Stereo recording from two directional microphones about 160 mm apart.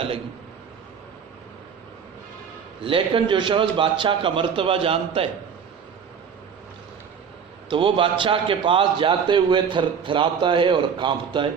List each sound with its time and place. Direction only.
2.8 s a man's voice: 35° right (ahead or behind)
7.7 s a man's voice: 30° right (ahead or behind)